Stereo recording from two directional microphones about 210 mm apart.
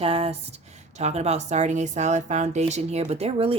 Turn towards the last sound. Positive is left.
turn(degrees=-30)  # may be behind; listen again after turning